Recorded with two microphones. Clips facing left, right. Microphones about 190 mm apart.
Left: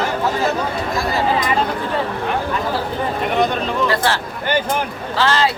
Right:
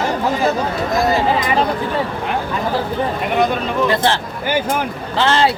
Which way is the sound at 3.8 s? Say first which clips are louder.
Right 2 dB; 20° right (ahead or behind).